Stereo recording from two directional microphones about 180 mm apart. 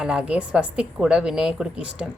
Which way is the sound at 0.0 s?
5° right (ahead or behind).